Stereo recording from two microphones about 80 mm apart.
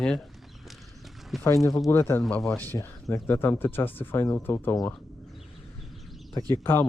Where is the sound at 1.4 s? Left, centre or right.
Left.